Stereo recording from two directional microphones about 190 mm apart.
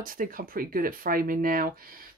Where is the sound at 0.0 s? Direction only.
50° right (ahead or behind).